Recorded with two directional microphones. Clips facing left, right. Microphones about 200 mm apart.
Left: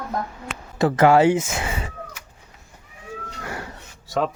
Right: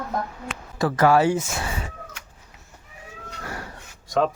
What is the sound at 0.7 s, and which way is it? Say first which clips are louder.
Speech: left 3 dB; 25° left (ahead or behind).